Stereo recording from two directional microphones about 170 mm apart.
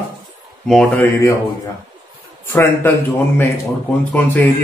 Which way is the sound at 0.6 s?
Centre (ahead or behind).